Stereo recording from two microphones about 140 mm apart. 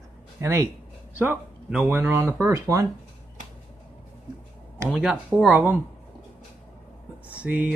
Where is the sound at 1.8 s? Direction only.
20° right (ahead or behind).